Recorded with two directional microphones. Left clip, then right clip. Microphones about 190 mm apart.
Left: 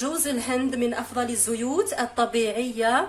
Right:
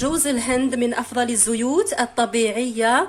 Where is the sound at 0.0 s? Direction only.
40° right (ahead or behind).